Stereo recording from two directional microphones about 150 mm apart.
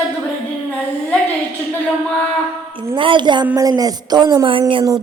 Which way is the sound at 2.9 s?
35° right (ahead or behind).